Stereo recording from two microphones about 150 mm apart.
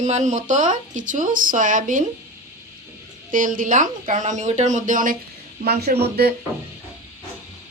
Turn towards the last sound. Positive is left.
turn(degrees=-90)